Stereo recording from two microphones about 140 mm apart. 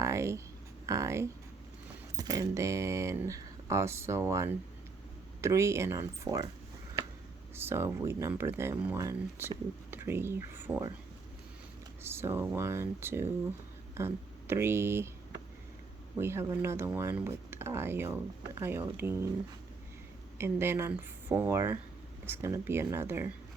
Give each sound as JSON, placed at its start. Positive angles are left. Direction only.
{"t": 0.0, "sound": "a sound", "side_deg": -20}
{"t": 0.9, "sound": "speech", "side_deg": -20}
{"t": 7.5, "sound": "speech", "side_deg": -15}
{"t": 12.0, "sound": "speech", "side_deg": -15}
{"t": 16.2, "sound": "speech", "side_deg": -15}
{"t": 20.4, "sound": "speech", "side_deg": -15}